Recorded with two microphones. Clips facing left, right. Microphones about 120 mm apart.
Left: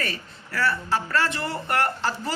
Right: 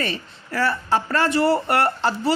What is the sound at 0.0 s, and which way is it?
A woman's voice, 30° right (ahead or behind).